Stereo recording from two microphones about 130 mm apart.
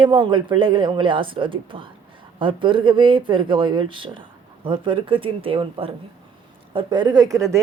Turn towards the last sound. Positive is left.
turn(degrees=-25)  # may be behind; listen again after turning